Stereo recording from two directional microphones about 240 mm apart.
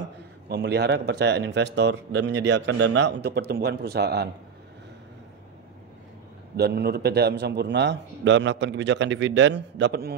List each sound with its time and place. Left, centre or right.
0.5 s speech: right
6.5 s speech: right